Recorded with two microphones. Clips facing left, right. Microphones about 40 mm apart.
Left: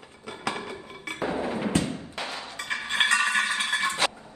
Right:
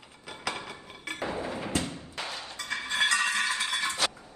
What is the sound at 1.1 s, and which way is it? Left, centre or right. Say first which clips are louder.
Music: left 5 dB; left.